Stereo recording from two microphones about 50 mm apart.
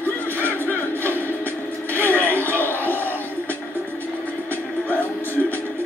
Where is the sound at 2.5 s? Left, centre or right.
Left.